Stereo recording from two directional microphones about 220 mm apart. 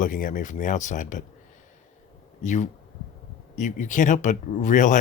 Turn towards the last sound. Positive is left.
turn(degrees=35)  # may be behind; listen again after turning